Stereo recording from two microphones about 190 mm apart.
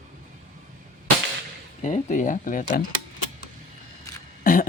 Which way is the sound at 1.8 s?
40° left (ahead or behind).